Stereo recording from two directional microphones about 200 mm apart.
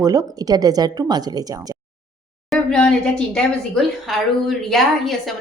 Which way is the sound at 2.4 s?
Centre (ahead or behind).